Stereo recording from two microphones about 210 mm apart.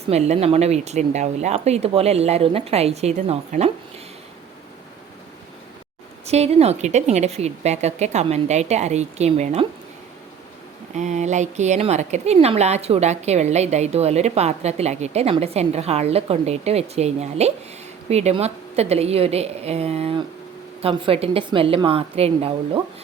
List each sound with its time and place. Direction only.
0.1 s a woman's voice: 30° right (ahead or behind)
6.2 s a woman's voice: 30° right (ahead or behind)
10.9 s a woman's voice: 35° right (ahead or behind)